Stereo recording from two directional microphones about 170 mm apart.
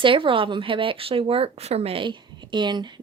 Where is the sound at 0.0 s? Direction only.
30° right (ahead or behind).